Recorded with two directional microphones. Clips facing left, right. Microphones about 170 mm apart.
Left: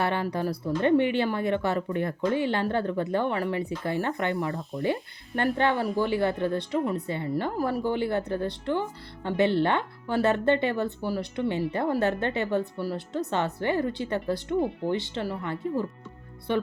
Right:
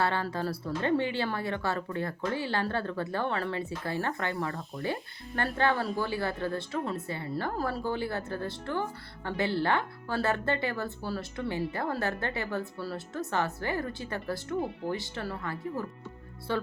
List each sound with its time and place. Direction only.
0.0 s speech: 20° left (ahead or behind)